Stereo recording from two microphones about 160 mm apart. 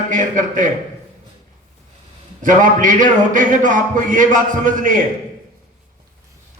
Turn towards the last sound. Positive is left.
turn(degrees=-55)  # may be behind; listen again after turning